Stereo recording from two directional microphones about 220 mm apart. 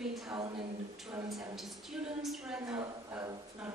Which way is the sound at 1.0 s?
5° right (ahead or behind).